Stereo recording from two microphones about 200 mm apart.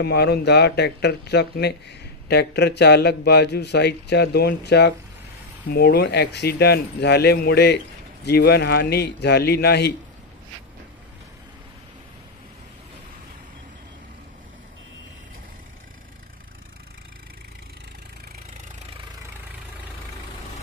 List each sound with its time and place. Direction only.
0.0 s speech: 55° left (ahead or behind)